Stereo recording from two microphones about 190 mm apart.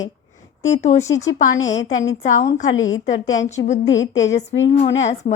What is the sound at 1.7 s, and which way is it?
Speech, 80° left.